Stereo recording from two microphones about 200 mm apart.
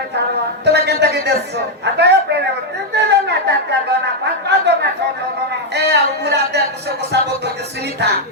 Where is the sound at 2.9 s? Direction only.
55° right (ahead or behind).